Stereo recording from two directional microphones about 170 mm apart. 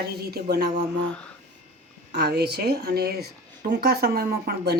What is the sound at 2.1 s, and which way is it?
Speech, 75° right (ahead or behind).